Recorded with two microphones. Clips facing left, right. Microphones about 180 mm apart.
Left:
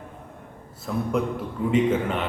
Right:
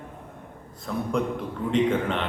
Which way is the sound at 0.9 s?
5° left (ahead or behind).